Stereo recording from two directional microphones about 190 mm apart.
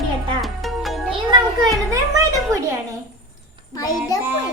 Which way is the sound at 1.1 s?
20° right (ahead or behind).